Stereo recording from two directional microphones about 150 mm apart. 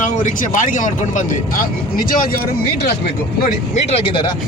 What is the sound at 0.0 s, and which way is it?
Speech, 60° left (ahead or behind).